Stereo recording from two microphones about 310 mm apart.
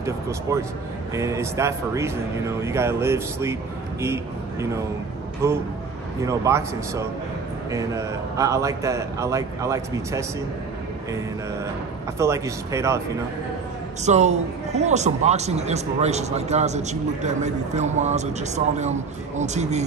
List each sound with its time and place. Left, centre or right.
0.0 s a man's voice: centre
12.2 s a man's voice: centre
14.0 s a man's voice: right